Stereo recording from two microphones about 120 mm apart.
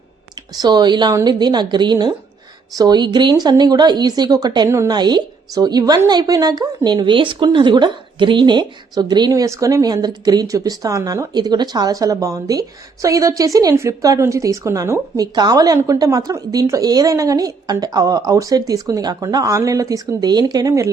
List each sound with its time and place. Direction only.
0.5 s a woman's voice: 35° right (ahead or behind)
4.7 s a woman's voice: 25° right (ahead or behind)
4.9 s a woman's voice: 35° right (ahead or behind)